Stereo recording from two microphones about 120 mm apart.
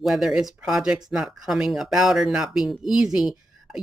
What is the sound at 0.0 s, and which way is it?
Speech, 5° right (ahead or behind).